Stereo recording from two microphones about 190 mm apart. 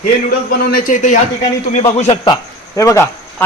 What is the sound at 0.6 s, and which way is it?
Speech, 45° left (ahead or behind).